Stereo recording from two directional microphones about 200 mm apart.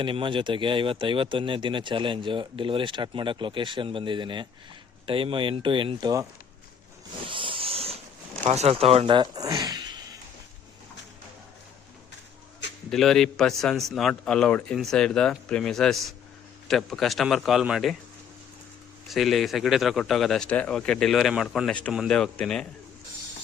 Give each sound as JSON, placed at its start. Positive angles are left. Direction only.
{"t": 0.0, "sound": "speech", "side_deg": -25}
{"t": 7.3, "sound": "a sound", "side_deg": -25}
{"t": 8.4, "sound": "speech", "side_deg": -30}
{"t": 12.9, "sound": "a man's voice", "side_deg": 0}
{"t": 19.0, "sound": "a man's voice", "side_deg": 0}